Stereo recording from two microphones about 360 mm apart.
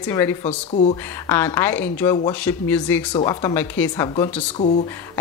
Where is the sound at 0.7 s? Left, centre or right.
Centre.